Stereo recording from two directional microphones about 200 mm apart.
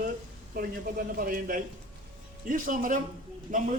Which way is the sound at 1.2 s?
45° right (ahead or behind).